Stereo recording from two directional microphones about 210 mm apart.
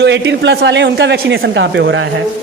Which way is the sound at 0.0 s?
55° right (ahead or behind).